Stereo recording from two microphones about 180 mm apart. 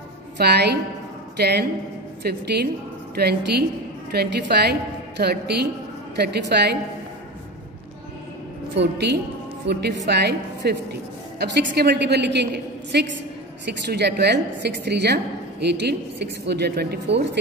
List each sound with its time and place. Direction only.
0.4 s a woman's voice: 65° right (ahead or behind)
8.7 s a woman's voice: 70° right (ahead or behind)